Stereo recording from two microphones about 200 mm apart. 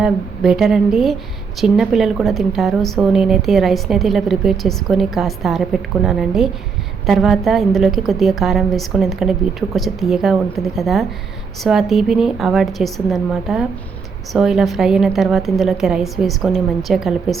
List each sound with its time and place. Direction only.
0.0 s a woman's voice: centre (ahead or behind)